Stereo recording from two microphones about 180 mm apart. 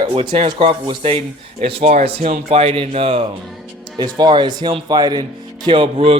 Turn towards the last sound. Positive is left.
turn(degrees=-30)  # may be behind; listen again after turning